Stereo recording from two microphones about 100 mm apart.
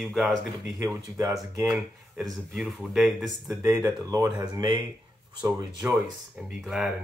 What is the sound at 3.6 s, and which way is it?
Speech, 35° right (ahead or behind).